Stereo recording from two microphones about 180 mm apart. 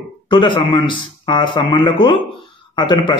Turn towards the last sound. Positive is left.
turn(degrees=25)  # may be behind; listen again after turning